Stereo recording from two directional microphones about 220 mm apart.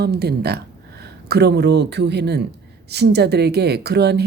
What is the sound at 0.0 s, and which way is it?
Speech, 45° right (ahead or behind).